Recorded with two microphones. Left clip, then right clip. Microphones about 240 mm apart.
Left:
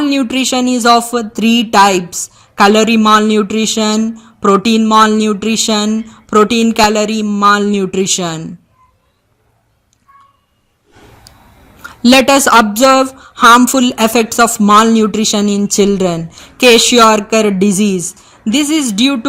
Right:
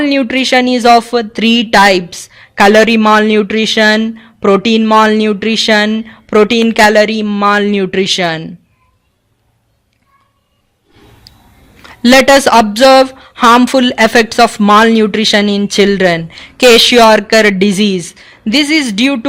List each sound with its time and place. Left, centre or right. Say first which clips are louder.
0.0 s speech: right 2 dB; right
11.8 s speech: right 2 dB; right